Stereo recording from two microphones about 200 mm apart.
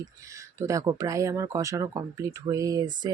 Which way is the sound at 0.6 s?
15° right (ahead or behind).